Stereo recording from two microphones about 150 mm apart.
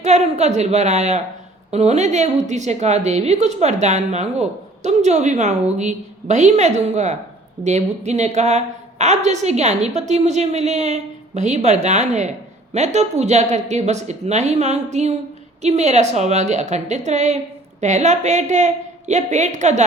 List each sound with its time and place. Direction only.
0.0 s a woman's voice: 50° right (ahead or behind)